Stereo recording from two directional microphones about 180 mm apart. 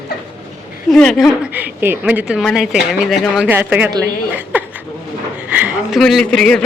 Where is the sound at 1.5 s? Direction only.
10° right (ahead or behind).